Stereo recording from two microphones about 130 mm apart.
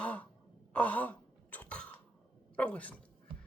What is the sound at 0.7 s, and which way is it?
Wail, 10° left (ahead or behind).